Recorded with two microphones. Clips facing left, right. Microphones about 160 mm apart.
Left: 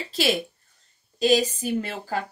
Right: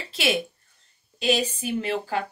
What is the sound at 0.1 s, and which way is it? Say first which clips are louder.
A woman's voice: left 1 dB; 35° left (ahead or behind).